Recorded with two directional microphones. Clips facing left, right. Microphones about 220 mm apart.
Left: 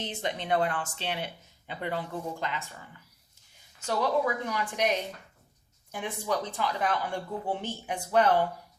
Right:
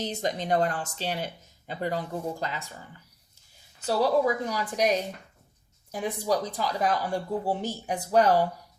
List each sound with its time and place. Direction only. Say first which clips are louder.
0.0 s speech: right 4 dB; 40° right (ahead or behind)
3.8 s speech: right 4 dB; 35° right (ahead or behind)